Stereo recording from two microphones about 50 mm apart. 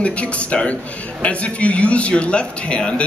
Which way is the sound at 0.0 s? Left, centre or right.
Left.